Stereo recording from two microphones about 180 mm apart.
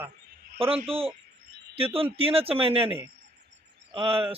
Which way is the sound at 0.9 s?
30° right (ahead or behind).